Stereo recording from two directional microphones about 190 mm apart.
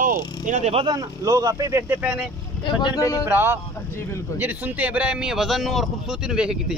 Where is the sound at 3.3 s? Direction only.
10° right (ahead or behind).